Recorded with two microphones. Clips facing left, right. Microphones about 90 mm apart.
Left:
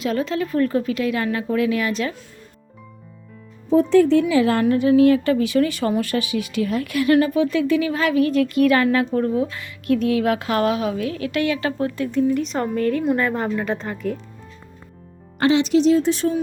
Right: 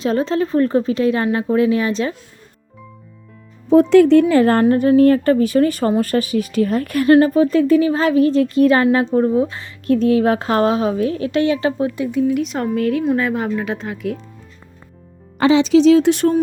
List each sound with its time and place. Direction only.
0.0 s a woman's voice: 30° right (ahead or behind)
3.7 s a woman's voice: 70° right (ahead or behind); by 11.7 s 30° right (ahead or behind)
11.8 s speech: 15° right (ahead or behind)
12.3 s a woman's voice: 5° right (ahead or behind)
15.8 s speech: 90° right; by 16.3 s 65° right (ahead or behind)